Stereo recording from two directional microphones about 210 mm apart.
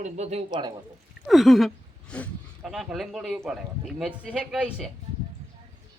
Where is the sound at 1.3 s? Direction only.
Centre (ahead or behind).